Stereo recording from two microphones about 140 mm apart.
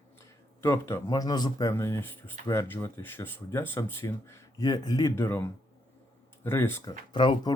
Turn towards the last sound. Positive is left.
turn(degrees=35)  # may be behind; listen again after turning